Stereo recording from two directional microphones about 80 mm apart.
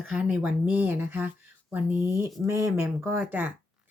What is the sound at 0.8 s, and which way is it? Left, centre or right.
Speech, right.